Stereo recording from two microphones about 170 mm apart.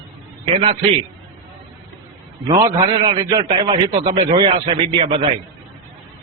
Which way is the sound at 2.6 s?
30° right (ahead or behind).